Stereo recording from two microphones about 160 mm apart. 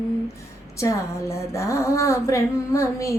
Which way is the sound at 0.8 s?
20° left (ahead or behind).